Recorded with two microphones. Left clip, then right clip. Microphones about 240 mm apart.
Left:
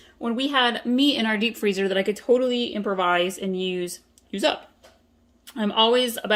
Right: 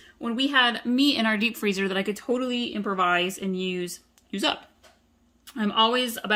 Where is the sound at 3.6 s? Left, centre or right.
Right.